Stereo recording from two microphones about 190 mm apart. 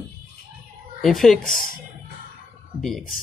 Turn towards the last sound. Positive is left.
turn(degrees=0)  # may be behind; listen again after turning